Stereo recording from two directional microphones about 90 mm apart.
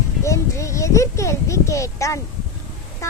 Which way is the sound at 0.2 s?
35° left (ahead or behind).